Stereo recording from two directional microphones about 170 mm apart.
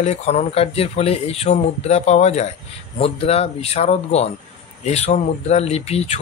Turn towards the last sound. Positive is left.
turn(degrees=40)  # may be behind; listen again after turning